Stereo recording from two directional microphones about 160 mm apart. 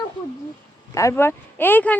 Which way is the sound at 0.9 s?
20° left (ahead or behind).